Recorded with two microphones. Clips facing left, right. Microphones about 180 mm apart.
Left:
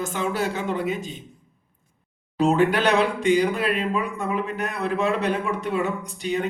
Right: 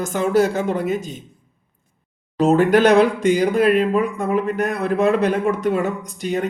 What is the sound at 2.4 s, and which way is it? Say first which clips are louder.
Speech: right 5 dB; 45° right (ahead or behind).